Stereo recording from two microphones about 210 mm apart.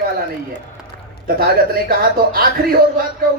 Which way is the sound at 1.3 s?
45° right (ahead or behind).